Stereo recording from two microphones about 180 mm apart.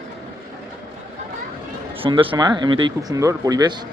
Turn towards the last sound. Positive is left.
turn(degrees=-20)  # may be behind; listen again after turning